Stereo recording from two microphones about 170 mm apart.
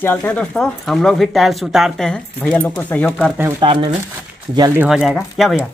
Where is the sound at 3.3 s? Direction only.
15° right (ahead or behind).